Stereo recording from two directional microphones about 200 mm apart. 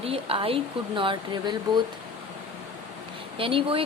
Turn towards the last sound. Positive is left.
turn(degrees=-25)  # may be behind; listen again after turning